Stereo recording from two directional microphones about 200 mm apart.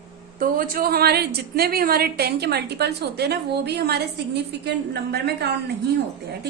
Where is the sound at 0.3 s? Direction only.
45° right (ahead or behind).